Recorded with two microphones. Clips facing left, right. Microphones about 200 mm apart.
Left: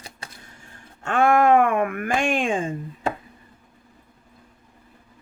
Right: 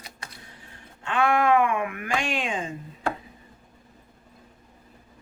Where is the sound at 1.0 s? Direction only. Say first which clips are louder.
Left 5 dB; 45° left (ahead or behind).